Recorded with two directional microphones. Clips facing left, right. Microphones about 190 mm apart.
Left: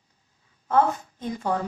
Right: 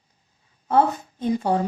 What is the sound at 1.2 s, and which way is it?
Speech, 30° right (ahead or behind).